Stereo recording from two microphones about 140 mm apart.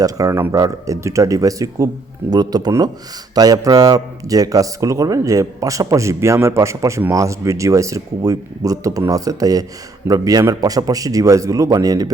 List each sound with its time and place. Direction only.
0.0 s a man's voice: 25° right (ahead or behind)